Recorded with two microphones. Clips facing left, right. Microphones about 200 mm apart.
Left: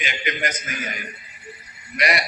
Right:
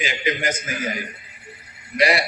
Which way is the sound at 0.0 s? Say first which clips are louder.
Right 4 dB; 30° right (ahead or behind).